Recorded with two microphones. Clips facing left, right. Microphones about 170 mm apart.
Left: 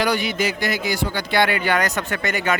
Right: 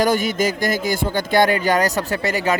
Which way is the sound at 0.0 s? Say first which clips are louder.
Right 3 dB; 45° right (ahead or behind).